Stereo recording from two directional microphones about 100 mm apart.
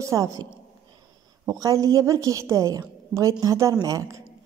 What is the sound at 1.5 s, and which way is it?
A woman's voice, 35° right (ahead or behind).